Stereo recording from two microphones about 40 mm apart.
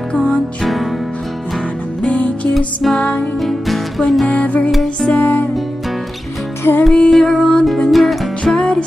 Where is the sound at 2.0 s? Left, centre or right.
Left.